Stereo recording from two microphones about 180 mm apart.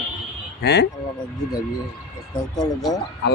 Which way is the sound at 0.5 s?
65° left (ahead or behind).